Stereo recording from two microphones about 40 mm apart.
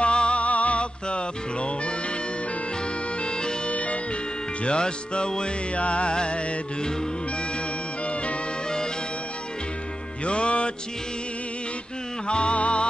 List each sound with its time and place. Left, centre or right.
0.0 s music: left
3.2 s bagpipes: left
3.7 s music: left
4.6 s music: left
8.1 s music: left
8.6 s music: centre
10.2 s music: left
12.3 s music: left